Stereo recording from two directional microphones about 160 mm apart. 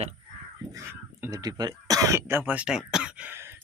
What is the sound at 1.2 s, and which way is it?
Speech, 20° right (ahead or behind).